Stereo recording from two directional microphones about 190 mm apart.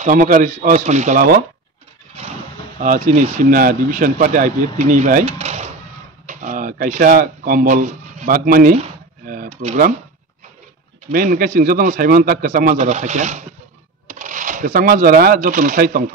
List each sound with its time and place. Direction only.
0.0 s speech: 45° right (ahead or behind)
2.8 s speech: 40° right (ahead or behind)
8.7 s a sound: 35° right (ahead or behind)
9.5 s speech: 35° right (ahead or behind)
11.1 s speech: 50° right (ahead or behind)